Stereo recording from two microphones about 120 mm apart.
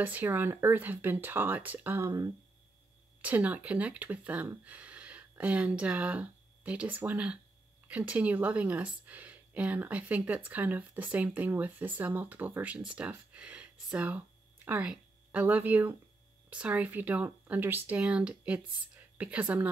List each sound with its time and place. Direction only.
0.0 s speech: 15° right (ahead or behind)
3.2 s speech: 10° right (ahead or behind)